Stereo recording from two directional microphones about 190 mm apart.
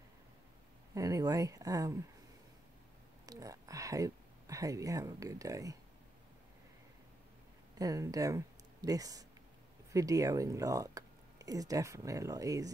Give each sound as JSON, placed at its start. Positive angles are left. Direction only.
{"t": 0.9, "sound": "speech", "side_deg": -15}
{"t": 3.3, "sound": "speech", "side_deg": -20}
{"t": 7.8, "sound": "speech", "side_deg": -20}